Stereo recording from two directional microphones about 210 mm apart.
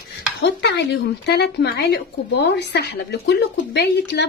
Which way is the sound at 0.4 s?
55° left (ahead or behind).